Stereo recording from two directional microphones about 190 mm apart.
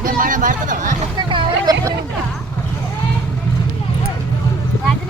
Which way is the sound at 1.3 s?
25° right (ahead or behind).